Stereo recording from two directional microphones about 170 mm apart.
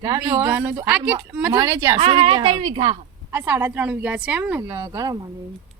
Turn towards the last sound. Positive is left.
turn(degrees=-20)  # may be behind; listen again after turning